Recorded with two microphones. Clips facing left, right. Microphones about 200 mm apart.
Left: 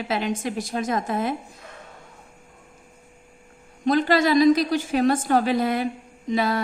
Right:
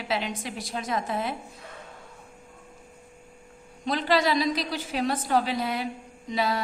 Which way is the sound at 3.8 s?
50° left (ahead or behind).